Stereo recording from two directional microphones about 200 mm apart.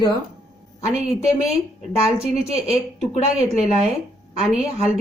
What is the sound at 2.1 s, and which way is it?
A woman's voice, 30° right (ahead or behind).